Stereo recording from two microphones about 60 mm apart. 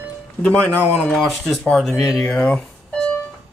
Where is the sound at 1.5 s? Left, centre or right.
Centre.